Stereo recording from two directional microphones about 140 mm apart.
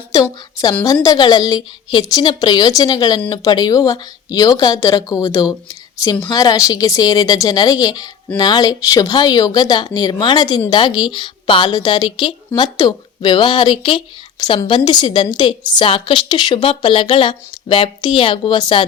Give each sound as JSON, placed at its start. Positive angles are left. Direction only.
{"t": 0.1, "sound": "a woman's voice", "side_deg": 25}